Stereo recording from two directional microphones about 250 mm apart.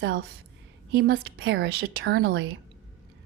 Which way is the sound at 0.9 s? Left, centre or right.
Right.